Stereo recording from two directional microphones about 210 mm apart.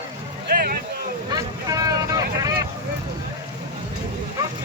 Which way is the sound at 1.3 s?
15° right (ahead or behind).